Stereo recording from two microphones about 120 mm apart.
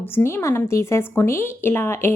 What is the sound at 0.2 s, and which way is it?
A woman's voice, 20° left (ahead or behind).